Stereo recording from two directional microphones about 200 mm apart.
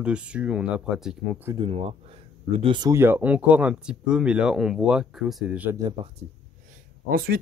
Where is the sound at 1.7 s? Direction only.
30° right (ahead or behind); by 5.8 s 5° right (ahead or behind).